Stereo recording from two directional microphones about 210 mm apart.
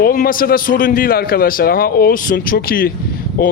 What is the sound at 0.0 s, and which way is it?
A man's voice, 45° left (ahead or behind).